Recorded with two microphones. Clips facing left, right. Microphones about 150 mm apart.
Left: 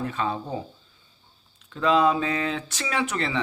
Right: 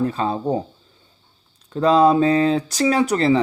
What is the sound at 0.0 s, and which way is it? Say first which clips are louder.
Speech: right 7 dB; 35° right (ahead or behind).